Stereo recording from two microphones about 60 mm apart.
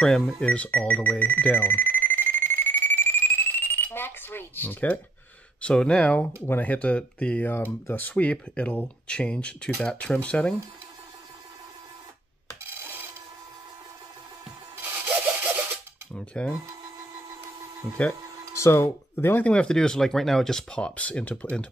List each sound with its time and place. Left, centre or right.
0.0 s speech: centre
0.5 s speech: left
1.2 s alarm: left
5.6 s speech: centre
7.4 s speech: left; by 10.5 s centre
14.8 s rub: right
16.1 s speech: centre
18.5 s speech: left
19.4 s speech: centre